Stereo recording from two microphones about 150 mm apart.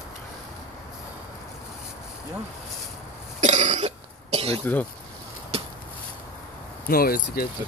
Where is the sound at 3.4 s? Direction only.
50° right (ahead or behind).